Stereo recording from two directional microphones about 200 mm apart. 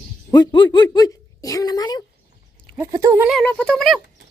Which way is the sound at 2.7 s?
15° right (ahead or behind).